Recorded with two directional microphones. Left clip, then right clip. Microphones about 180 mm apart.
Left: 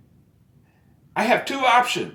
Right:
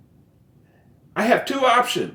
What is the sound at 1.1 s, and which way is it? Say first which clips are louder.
Speech: right 1 dB; 20° left (ahead or behind).